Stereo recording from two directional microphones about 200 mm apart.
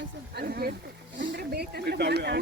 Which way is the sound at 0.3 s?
50° right (ahead or behind).